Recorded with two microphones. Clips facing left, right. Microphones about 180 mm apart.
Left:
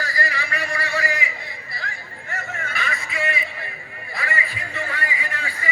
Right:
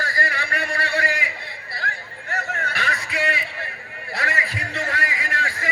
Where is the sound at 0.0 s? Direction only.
55° right (ahead or behind).